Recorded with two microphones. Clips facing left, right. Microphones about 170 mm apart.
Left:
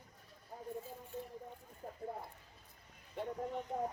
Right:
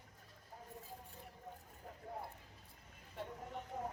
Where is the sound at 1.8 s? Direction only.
45° left (ahead or behind).